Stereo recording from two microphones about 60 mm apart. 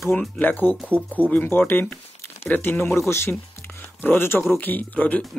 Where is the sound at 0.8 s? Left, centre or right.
Right.